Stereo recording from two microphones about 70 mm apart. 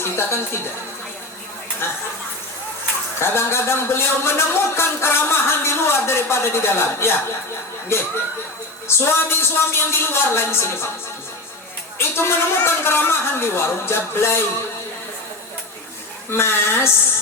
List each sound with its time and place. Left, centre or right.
0.2 s a man's voice: left
1.8 s a man's voice: left
3.2 s a man's voice: left
11.9 s a man's voice: left
16.3 s a man's voice: left